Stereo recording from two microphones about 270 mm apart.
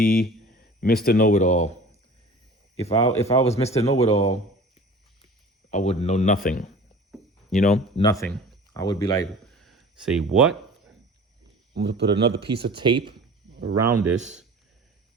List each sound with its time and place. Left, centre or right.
0.0 s speech: left
5.7 s speech: left
7.9 s speech: centre
9.6 s a sound: centre
11.7 s speech: right
12.7 s speech: centre
13.6 s speech: right
13.9 s speech: centre